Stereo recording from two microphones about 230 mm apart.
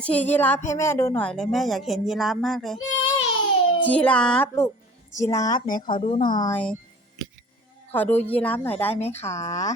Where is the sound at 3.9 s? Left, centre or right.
Centre.